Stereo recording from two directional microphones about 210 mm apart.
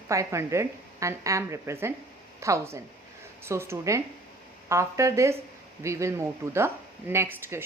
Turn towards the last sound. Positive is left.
turn(degrees=-10)  # may be behind; listen again after turning